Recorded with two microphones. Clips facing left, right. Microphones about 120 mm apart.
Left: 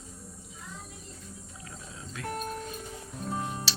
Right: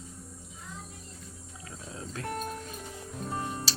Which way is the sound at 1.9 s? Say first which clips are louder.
Right 4 dB; 35° right (ahead or behind).